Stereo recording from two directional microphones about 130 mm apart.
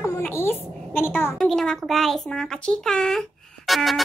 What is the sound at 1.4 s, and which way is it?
A woman's voice, 5° left (ahead or behind).